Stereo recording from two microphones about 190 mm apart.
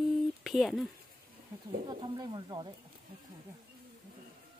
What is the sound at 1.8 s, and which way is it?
Speech, 20° right (ahead or behind).